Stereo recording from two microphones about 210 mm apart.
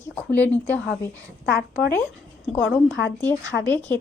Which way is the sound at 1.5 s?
50° left (ahead or behind).